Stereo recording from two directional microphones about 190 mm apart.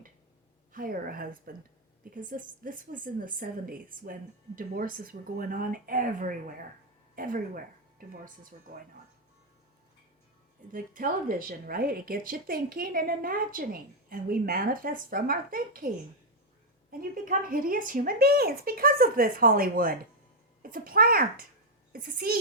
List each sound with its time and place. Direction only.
0.7 s a woman's voice: 50° right (ahead or behind)
10.7 s a woman's voice: 45° right (ahead or behind)
16.9 s a woman's voice: 45° right (ahead or behind)